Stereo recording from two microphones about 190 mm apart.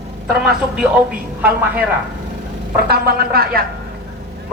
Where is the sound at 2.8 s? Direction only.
55° right (ahead or behind).